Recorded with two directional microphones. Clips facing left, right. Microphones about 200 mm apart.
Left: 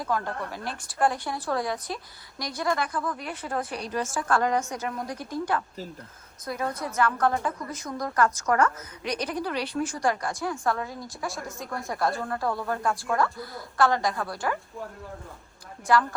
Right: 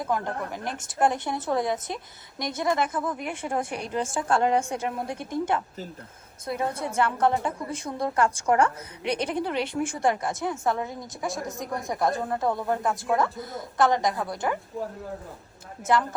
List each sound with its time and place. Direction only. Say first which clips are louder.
0.0 s a woman's voice: right 1 dB; 20° right (ahead or behind)